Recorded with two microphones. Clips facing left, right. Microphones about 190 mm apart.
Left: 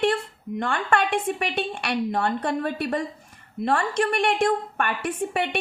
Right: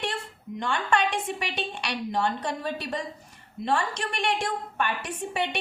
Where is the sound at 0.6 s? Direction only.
55° left (ahead or behind).